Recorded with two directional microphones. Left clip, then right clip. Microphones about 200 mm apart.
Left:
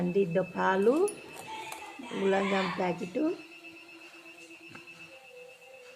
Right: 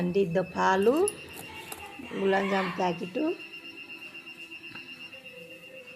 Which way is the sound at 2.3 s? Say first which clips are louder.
Right 2 dB; 10° right (ahead or behind).